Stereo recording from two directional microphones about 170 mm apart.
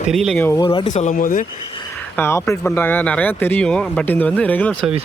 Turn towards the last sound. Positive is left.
turn(degrees=10)  # may be behind; listen again after turning